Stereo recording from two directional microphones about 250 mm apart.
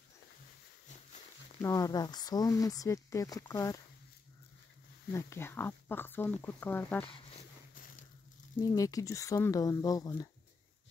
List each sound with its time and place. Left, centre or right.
1.6 s speech: centre
5.1 s speech: centre
7.1 s a sound: left
8.5 s speech: centre